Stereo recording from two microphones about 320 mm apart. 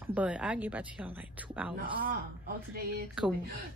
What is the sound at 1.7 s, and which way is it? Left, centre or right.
Speech, right.